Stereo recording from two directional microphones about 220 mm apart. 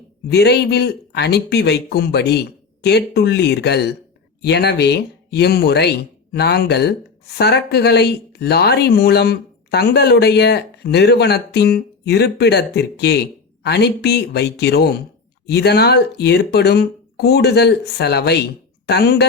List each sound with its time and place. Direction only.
0.3 s speech: 50° left (ahead or behind)